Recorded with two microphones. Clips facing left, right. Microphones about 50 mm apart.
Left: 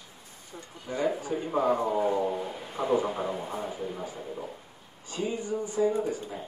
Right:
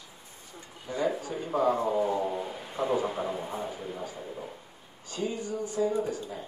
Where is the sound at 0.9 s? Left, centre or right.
Left.